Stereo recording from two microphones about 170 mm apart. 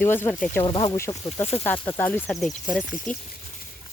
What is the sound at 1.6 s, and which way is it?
Speech, 15° left (ahead or behind).